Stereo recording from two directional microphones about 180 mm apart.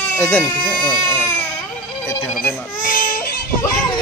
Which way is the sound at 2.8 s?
50° left (ahead or behind).